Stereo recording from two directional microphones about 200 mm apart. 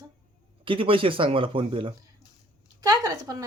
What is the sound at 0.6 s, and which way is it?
Speech, 25° right (ahead or behind).